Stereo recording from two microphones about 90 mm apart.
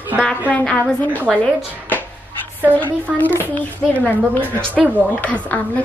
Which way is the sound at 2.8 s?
20° left (ahead or behind).